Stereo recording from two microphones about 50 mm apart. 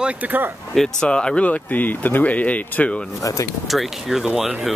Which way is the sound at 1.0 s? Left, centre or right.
Centre.